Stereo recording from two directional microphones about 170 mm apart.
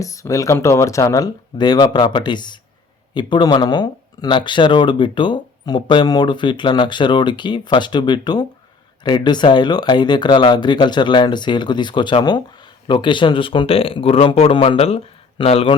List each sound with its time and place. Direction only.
0.0 s speech: 20° left (ahead or behind)